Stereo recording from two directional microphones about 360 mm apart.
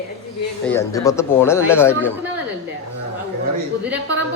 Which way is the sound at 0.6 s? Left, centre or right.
Centre.